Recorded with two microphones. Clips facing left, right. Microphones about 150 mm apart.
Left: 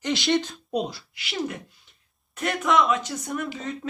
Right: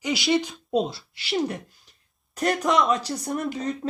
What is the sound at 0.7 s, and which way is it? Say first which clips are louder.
Speech: right 3 dB; 25° right (ahead or behind).